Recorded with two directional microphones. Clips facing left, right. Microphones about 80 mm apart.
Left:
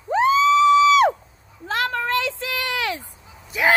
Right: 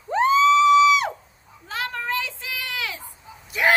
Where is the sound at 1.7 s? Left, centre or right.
Left.